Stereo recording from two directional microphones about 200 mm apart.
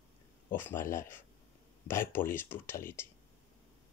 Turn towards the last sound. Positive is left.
turn(degrees=10)  # may be behind; listen again after turning